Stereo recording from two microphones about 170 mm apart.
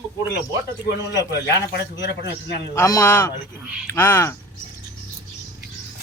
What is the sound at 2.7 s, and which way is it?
Speech, 20° left (ahead or behind).